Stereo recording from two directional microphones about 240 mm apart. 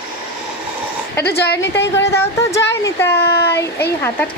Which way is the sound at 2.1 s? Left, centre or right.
Centre.